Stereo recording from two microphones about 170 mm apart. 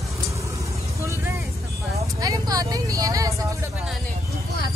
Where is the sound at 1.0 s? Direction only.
15° right (ahead or behind).